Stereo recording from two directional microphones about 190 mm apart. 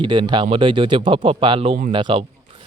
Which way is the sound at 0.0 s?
25° right (ahead or behind).